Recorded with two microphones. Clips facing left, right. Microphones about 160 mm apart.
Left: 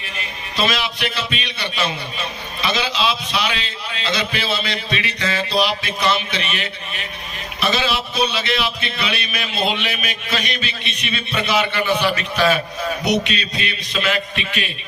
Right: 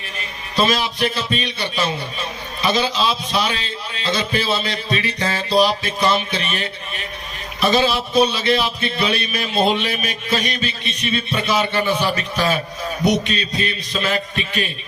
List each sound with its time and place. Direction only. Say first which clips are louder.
0.5 s a man's voice: right 3 dB; 40° right (ahead or behind)